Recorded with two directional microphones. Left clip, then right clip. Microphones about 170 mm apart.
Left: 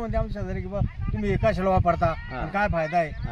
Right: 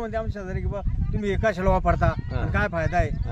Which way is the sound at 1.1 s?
20° right (ahead or behind).